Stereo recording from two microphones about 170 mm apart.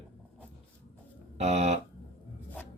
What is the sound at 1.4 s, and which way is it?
Speech, 40° right (ahead or behind).